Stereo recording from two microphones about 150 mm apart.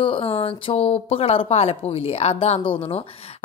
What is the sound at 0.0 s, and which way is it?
A woman's voice, 35° left (ahead or behind).